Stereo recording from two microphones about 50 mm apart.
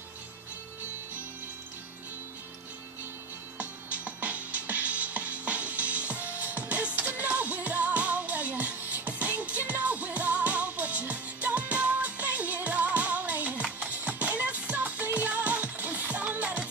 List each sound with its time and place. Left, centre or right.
3.5 s music: right